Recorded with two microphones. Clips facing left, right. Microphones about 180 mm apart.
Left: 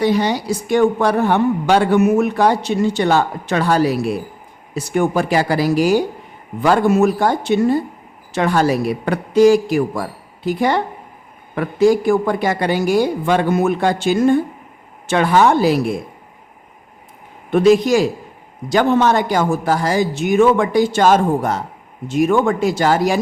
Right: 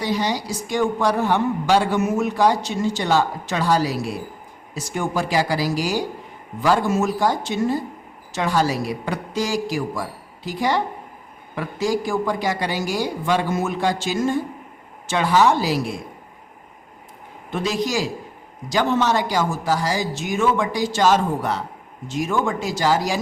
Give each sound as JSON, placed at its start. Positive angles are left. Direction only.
{"t": 0.0, "sound": "speech", "side_deg": 60}
{"t": 17.5, "sound": "speech", "side_deg": 60}
{"t": 22.0, "sound": "speech", "side_deg": 60}